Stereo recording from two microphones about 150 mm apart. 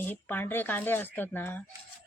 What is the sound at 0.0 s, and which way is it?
Speech, 10° left (ahead or behind).